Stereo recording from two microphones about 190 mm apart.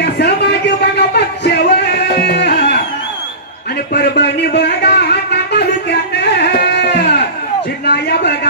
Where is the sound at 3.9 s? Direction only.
60° left (ahead or behind).